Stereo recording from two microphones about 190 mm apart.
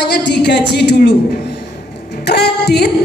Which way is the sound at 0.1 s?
65° left (ahead or behind).